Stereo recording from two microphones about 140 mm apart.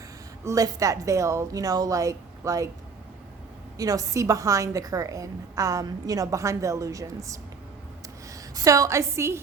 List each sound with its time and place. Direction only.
0.4 s a woman's voice: 25° right (ahead or behind)
3.8 s a woman's voice: 25° right (ahead or behind)